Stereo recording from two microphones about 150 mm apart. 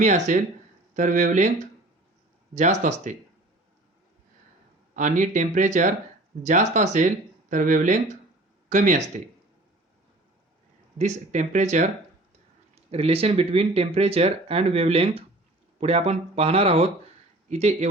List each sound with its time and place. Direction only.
0.3 s speech: 60° right (ahead or behind)
4.9 s speech: 60° right (ahead or behind)
10.9 s speech: 50° right (ahead or behind)